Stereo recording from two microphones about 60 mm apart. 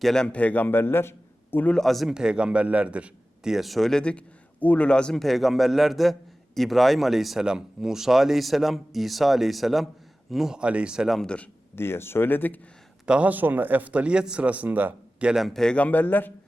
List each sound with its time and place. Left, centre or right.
0.0 s speech: centre
0.3 s a man's voice: left
1.7 s speech: centre
2.0 s a man's voice: centre
3.4 s speech: centre
4.6 s a man's voice: left
5.1 s speech: centre
11.7 s speech: left
13.1 s a man's voice: right
15.2 s speech: centre
15.4 s speech: centre
15.7 s speech: left